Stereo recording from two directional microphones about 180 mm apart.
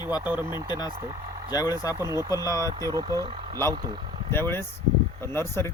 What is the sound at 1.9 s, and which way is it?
Speech, 15° right (ahead or behind).